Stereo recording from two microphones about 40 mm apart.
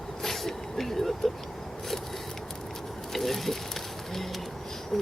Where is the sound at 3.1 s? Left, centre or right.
Centre.